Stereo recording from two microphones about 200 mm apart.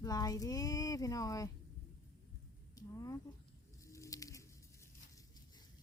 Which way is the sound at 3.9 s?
15° left (ahead or behind).